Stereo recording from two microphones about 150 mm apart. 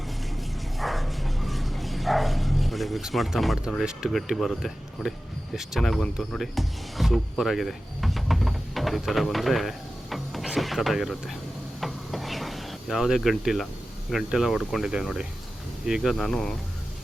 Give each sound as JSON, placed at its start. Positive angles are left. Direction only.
{"t": 0.3, "sound": "bow-wow", "side_deg": 0}
{"t": 5.5, "sound": "speech", "side_deg": 0}
{"t": 11.8, "sound": "rub", "side_deg": 0}
{"t": 14.1, "sound": "speech", "side_deg": -5}